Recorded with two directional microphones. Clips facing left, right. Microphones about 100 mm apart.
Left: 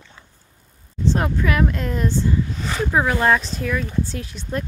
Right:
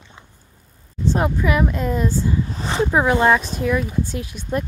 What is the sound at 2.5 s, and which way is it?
Speech, 25° right (ahead or behind).